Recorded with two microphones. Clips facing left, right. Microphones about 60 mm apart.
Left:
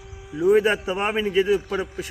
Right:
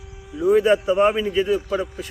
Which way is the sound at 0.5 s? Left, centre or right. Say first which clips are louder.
Right 4 dB; centre.